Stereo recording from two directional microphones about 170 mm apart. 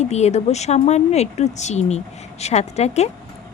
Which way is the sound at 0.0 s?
40° left (ahead or behind).